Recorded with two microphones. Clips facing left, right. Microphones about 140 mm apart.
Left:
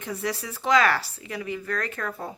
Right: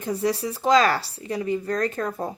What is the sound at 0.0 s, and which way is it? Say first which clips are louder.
Speech: right 6 dB; 35° right (ahead or behind).